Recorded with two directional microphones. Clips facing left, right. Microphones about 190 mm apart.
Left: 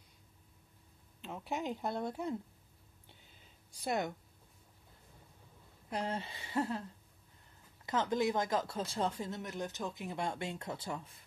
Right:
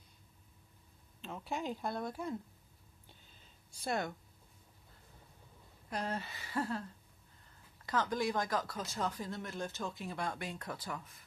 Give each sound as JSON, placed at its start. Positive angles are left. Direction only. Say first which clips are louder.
{"t": 1.2, "sound": "speech", "louder": "left 1 dB", "side_deg": 15}
{"t": 3.1, "sound": "a sound", "louder": "left 1 dB", "side_deg": 20}
{"t": 5.9, "sound": "speech", "louder": "left 1 dB", "side_deg": 25}
{"t": 7.8, "sound": "speech", "louder": "left 2 dB", "side_deg": 25}